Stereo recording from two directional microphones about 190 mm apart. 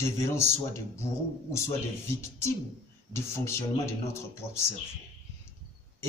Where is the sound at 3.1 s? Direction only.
15° left (ahead or behind).